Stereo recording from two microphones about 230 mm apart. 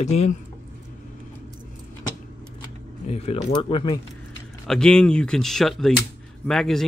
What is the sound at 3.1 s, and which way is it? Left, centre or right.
Speech, left.